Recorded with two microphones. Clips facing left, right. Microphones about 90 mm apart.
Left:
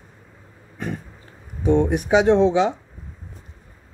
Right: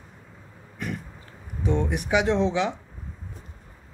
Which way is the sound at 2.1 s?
30° left (ahead or behind).